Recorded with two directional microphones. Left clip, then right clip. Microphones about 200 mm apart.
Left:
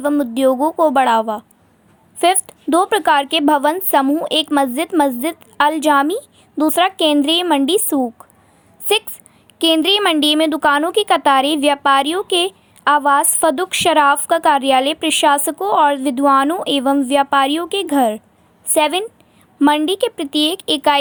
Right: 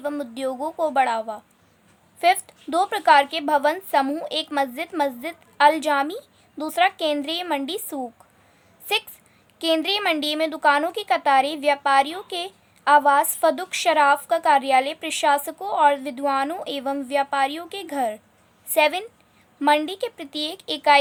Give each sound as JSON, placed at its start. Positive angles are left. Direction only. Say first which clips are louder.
{"t": 0.0, "sound": "speech", "louder": "left 12 dB", "side_deg": 25}